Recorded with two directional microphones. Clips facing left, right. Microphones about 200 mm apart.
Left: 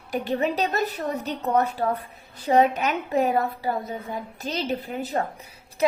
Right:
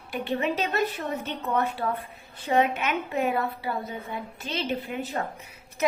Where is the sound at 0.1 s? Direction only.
40° left (ahead or behind).